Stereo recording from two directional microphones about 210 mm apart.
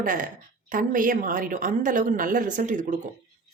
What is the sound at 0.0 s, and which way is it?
A woman's voice, 40° right (ahead or behind).